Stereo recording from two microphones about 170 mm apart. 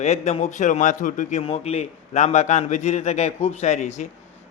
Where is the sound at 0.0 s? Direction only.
40° left (ahead or behind).